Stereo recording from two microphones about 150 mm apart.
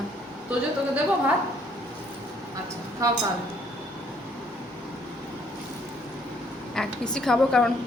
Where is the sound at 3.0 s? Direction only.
20° right (ahead or behind).